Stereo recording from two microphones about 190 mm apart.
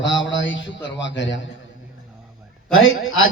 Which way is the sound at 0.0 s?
80° left.